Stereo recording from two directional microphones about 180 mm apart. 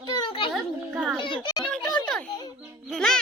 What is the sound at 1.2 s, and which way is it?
Speech, 25° left (ahead or behind).